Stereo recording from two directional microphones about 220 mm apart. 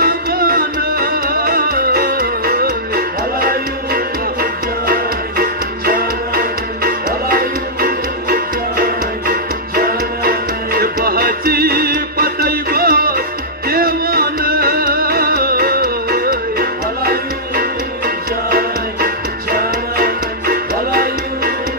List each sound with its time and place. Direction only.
0.0 s music: 40° right (ahead or behind)